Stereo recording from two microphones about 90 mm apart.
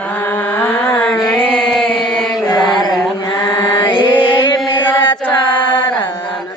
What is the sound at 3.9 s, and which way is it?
Mantra, 70° left (ahead or behind).